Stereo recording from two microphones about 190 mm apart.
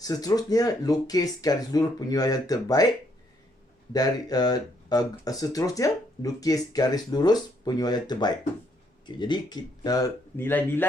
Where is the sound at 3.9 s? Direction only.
20° left (ahead or behind).